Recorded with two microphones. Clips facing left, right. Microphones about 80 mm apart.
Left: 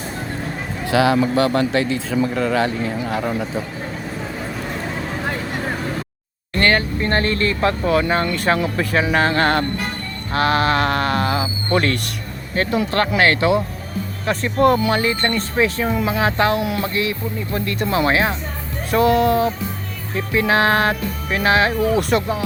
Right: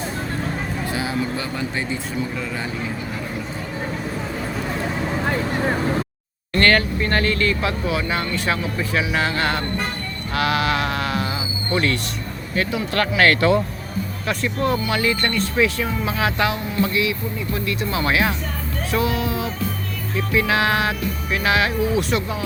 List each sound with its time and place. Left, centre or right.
0.9 s speech: left
2.3 s speech: left
6.6 s speech: left
7.0 s speech: left
8.5 s speech: left
9.0 s speech: left
12.5 s speech: left; by 13.6 s centre
14.3 s speech: left
16.6 s speech: left
16.8 s speech: left
18.0 s speech: left
18.9 s speech: left
20.1 s speech: left
21.8 s speech: left